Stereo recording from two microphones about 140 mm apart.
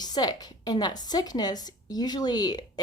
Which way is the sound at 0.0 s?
30° left (ahead or behind).